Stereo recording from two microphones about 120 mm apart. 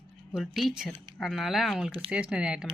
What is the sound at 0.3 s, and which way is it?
Speech, centre (ahead or behind).